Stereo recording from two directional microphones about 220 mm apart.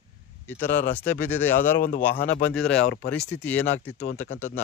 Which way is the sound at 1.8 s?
40° left (ahead or behind).